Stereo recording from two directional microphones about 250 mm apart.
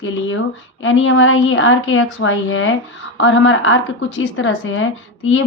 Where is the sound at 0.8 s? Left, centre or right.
Left.